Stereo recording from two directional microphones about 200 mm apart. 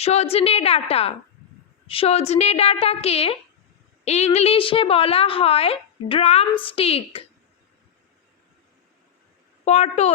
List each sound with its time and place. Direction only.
0.0 s a woman's voice: 30° left (ahead or behind)
9.6 s a woman's voice: 35° left (ahead or behind)